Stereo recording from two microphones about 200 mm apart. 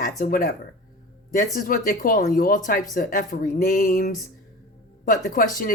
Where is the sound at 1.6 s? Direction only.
45° left (ahead or behind).